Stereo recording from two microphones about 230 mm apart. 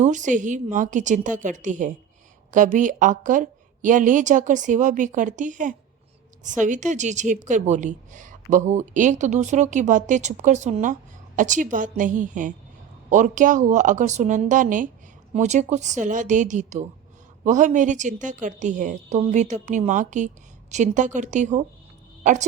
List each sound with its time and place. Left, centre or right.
0.0 s a woman's voice: right